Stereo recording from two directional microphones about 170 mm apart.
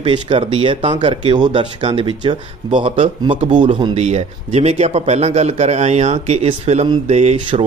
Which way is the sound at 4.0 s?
40° right (ahead or behind).